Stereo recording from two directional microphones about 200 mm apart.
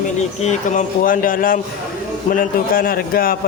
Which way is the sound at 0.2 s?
35° left (ahead or behind).